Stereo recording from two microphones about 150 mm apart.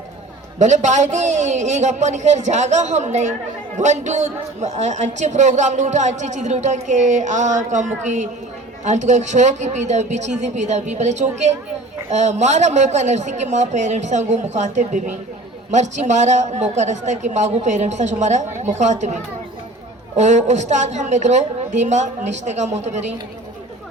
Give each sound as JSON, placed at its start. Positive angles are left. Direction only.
{"t": 0.6, "sound": "a woman's voice", "side_deg": -55}
{"t": 20.1, "sound": "a woman's voice", "side_deg": -50}